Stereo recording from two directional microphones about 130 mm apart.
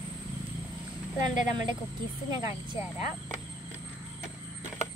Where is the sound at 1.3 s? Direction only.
70° left (ahead or behind).